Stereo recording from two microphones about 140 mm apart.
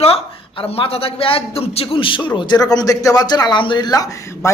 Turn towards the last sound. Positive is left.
turn(degrees=20)  # may be behind; listen again after turning